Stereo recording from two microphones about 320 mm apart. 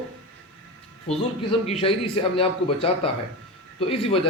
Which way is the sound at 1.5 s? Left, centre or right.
Centre.